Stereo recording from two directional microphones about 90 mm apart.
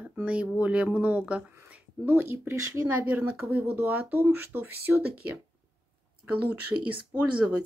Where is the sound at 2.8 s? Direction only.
15° right (ahead or behind).